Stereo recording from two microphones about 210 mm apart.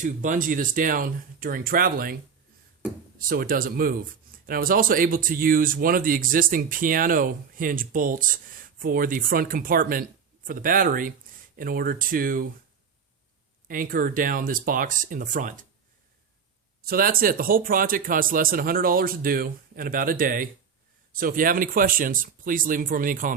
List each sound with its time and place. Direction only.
0.0 s speech: 40° right (ahead or behind)
3.2 s speech: 45° right (ahead or behind)
13.7 s speech: 40° right (ahead or behind)
16.8 s speech: 45° right (ahead or behind)